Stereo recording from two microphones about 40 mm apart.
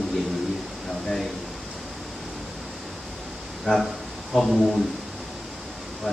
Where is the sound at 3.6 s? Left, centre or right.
Centre.